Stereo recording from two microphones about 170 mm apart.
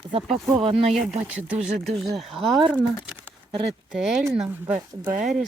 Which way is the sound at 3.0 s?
10° right (ahead or behind).